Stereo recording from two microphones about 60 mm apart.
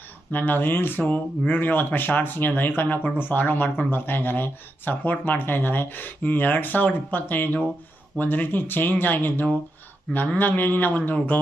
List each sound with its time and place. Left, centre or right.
0.3 s speech: left